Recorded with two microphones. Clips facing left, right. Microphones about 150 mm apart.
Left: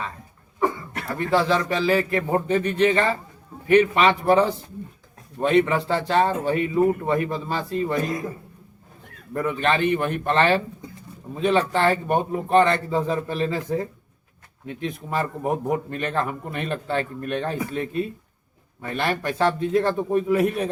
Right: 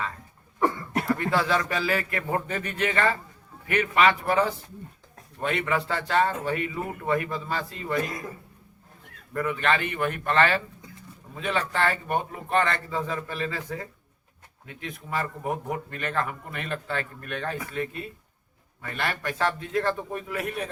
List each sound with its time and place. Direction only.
1.3 s a man's voice: 20° left (ahead or behind)
9.3 s a man's voice: 25° left (ahead or behind)